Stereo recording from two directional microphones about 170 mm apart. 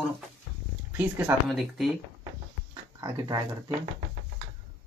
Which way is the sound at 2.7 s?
25° right (ahead or behind).